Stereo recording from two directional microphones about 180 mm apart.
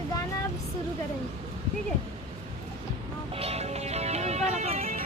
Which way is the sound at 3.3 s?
35° right (ahead or behind).